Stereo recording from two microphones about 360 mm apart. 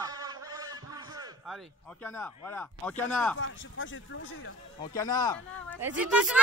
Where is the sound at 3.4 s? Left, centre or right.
Left.